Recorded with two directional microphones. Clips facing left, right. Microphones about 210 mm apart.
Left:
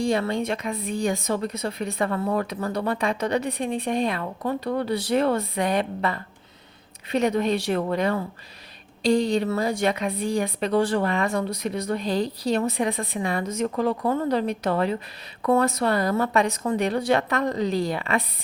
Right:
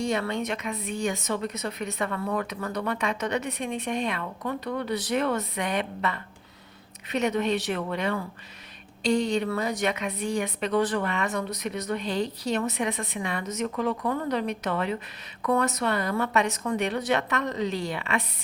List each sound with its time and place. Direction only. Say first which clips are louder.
0.0 s a woman's voice: left 4 dB; 35° left (ahead or behind)